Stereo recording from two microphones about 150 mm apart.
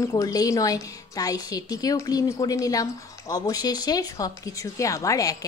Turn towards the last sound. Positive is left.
turn(degrees=20)  # may be behind; listen again after turning